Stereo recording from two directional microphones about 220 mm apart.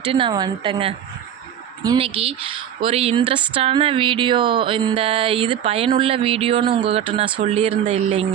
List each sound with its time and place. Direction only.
0.1 s speech: 20° right (ahead or behind)